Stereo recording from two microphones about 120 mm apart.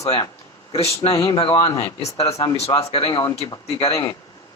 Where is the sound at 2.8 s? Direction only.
55° left (ahead or behind).